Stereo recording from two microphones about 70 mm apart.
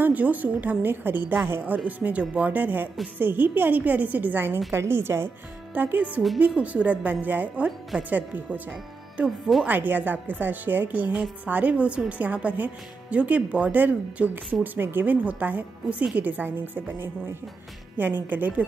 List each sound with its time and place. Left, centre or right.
0.0 s a woman's voice: right
9.2 s speech: centre